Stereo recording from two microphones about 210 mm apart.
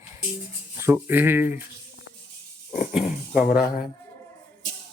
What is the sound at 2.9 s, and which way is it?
Dog, 5° right (ahead or behind).